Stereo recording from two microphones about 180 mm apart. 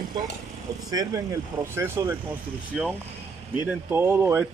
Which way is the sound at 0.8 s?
20° right (ahead or behind).